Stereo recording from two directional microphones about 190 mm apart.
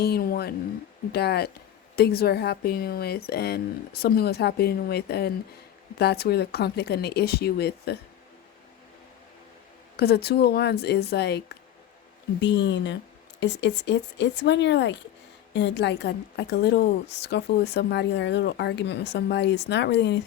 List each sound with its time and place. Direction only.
0.0 s a woman's voice: 55° left (ahead or behind)
10.0 s a woman's voice: 55° left (ahead or behind)